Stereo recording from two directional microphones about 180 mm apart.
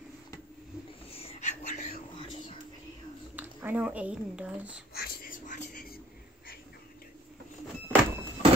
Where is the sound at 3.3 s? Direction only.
10° right (ahead or behind).